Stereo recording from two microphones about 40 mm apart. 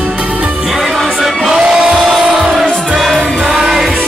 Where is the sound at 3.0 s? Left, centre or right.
Centre.